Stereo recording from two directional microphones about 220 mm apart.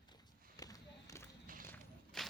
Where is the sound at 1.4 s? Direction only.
40° right (ahead or behind).